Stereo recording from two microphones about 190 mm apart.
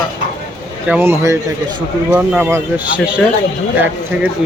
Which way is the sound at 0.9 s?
10° right (ahead or behind).